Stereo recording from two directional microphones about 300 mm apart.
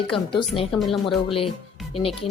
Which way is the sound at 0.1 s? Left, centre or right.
Centre.